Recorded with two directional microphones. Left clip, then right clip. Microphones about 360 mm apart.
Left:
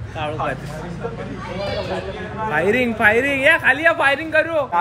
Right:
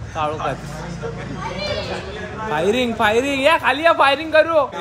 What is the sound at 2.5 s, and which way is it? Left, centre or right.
Speech, centre.